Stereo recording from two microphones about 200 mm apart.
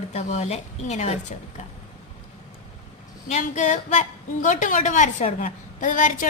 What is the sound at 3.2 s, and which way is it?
A woman's voice, 35° left (ahead or behind).